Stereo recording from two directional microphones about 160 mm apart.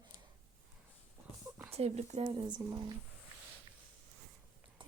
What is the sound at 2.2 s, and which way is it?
Speech, 30° right (ahead or behind).